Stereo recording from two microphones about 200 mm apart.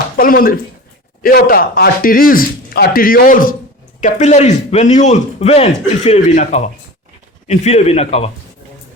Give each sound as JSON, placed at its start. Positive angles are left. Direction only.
{"t": 0.2, "sound": "speech", "side_deg": 45}